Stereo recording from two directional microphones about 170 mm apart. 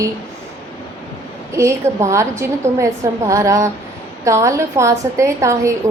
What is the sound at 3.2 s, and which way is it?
A woman's voice, 20° right (ahead or behind).